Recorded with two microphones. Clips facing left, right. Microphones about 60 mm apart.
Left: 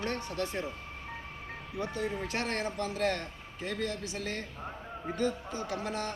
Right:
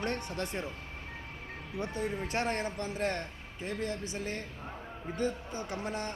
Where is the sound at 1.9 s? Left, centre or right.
Right.